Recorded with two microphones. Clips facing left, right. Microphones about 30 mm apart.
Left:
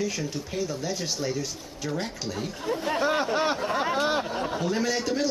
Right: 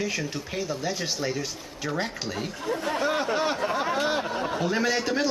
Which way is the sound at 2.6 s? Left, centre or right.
Centre.